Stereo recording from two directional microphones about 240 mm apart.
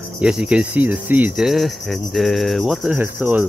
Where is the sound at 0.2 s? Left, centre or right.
Centre.